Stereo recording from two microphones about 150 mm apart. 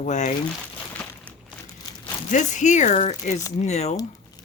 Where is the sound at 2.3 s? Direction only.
55° left (ahead or behind).